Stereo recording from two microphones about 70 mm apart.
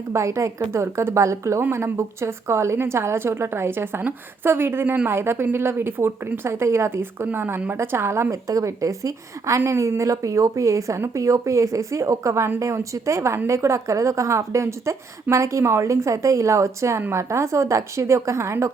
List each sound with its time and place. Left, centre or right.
0.1 s a woman's voice: right
8.3 s a woman's voice: right